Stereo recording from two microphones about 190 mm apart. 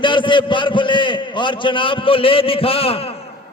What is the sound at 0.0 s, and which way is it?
A man's voice, 25° left (ahead or behind).